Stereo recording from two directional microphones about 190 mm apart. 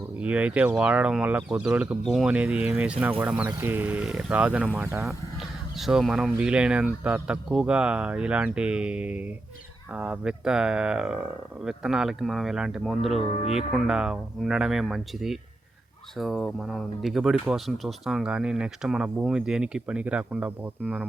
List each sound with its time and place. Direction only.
0.2 s speech: 5° right (ahead or behind)
13.4 s speech: 35° left (ahead or behind)
13.7 s speech: centre (ahead or behind)